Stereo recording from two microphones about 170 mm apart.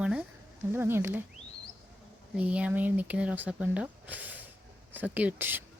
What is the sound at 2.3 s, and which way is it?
Speech, 5° right (ahead or behind).